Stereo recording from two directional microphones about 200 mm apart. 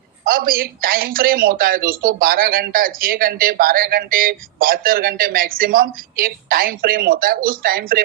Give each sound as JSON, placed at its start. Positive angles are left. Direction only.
{"t": 0.3, "sound": "speech", "side_deg": -45}